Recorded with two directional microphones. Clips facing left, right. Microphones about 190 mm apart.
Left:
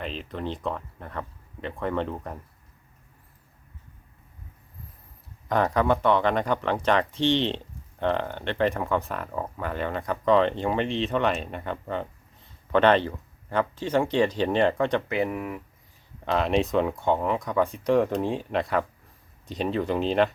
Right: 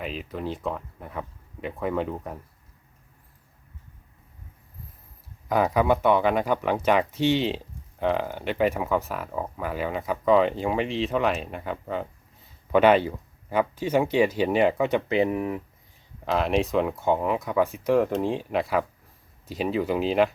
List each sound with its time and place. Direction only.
0.0 s speech: 5° right (ahead or behind)
5.5 s speech: 10° right (ahead or behind)
15.1 s speech: 25° right (ahead or behind)
16.2 s speech: centre (ahead or behind)